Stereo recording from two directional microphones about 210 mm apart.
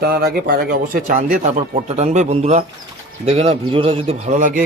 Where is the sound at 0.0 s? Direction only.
45° right (ahead or behind).